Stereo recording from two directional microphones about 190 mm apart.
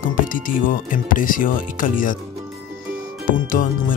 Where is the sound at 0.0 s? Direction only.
45° left (ahead or behind).